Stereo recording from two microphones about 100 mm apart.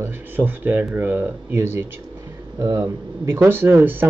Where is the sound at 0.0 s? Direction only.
20° right (ahead or behind).